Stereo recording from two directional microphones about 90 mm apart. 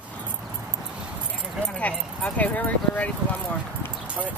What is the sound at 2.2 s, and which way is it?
Speech, 20° left (ahead or behind).